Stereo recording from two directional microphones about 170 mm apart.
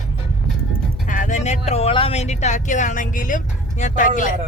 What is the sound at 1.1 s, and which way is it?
Speech, 50° left (ahead or behind).